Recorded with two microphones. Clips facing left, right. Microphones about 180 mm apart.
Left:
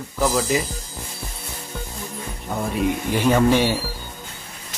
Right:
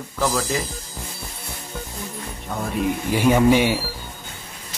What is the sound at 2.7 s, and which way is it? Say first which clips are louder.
Speech: even; 10° right (ahead or behind).